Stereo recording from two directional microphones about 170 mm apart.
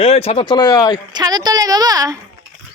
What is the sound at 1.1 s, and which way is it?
A woman's voice, 25° right (ahead or behind).